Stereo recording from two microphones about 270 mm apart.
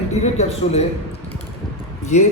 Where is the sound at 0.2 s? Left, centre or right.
Left.